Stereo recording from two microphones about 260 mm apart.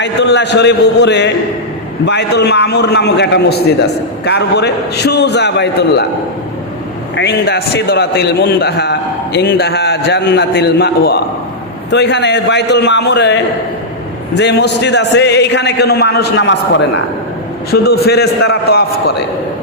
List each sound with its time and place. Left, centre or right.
0.0 s a man's voice: left
7.2 s a man's voice: left